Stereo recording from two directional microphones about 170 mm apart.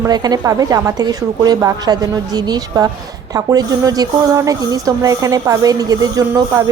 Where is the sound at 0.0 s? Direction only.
25° right (ahead or behind).